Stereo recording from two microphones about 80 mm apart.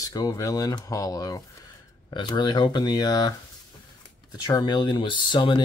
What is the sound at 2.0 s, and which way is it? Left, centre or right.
Speech, left.